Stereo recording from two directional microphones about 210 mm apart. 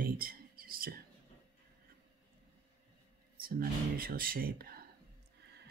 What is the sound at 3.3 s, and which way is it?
Speech, 45° right (ahead or behind).